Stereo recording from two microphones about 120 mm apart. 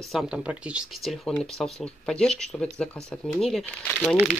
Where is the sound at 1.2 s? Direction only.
5° left (ahead or behind).